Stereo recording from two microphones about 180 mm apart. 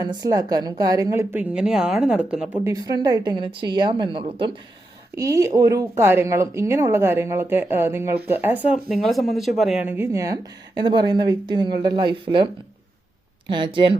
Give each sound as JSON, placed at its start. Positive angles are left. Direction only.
{"t": 0.0, "sound": "a woman's voice", "side_deg": -20}
{"t": 2.7, "sound": "a woman's voice", "side_deg": -20}
{"t": 5.1, "sound": "a woman's voice", "side_deg": -15}
{"t": 13.5, "sound": "a woman's voice", "side_deg": -25}